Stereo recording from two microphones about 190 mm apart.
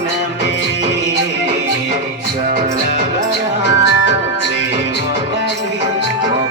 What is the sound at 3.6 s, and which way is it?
Music, 65° left (ahead or behind).